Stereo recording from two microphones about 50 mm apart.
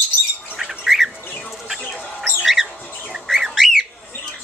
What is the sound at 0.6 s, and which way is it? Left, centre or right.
Bird, centre.